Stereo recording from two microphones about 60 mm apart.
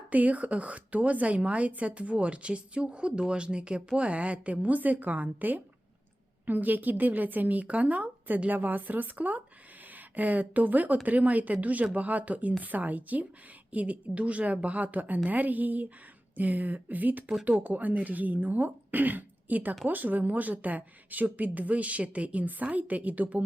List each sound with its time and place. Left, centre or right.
0.1 s speech: right